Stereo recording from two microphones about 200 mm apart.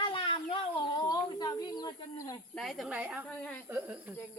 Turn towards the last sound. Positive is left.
turn(degrees=-5)  # may be behind; listen again after turning